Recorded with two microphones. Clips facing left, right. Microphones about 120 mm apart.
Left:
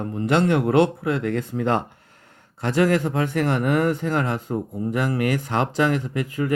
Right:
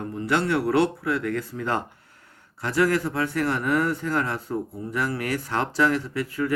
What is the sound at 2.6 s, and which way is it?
Speech, 20° left (ahead or behind).